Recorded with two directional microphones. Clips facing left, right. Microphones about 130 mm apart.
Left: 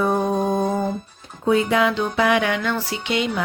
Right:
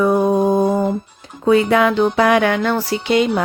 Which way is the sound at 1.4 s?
80° right.